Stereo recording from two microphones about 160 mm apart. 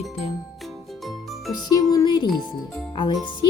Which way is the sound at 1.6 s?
25° left (ahead or behind).